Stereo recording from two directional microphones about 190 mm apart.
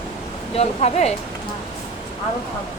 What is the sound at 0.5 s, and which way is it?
Speech, 35° left (ahead or behind).